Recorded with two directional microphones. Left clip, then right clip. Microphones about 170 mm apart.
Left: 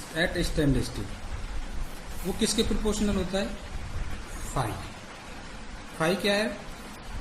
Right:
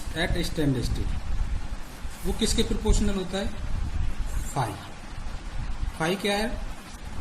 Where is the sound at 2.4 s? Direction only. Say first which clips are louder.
Even; centre (ahead or behind).